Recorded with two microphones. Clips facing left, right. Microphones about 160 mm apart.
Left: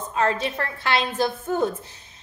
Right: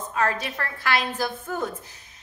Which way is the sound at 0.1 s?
25° left (ahead or behind).